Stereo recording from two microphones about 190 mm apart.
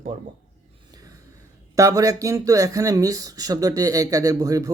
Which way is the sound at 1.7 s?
15° right (ahead or behind).